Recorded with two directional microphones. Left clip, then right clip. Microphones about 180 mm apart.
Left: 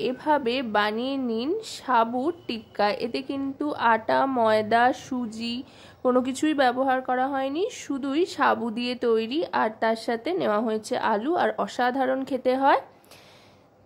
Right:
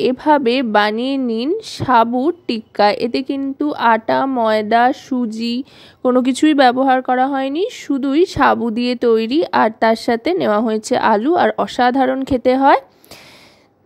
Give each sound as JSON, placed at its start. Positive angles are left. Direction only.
{"t": 0.0, "sound": "a woman's voice", "side_deg": -40}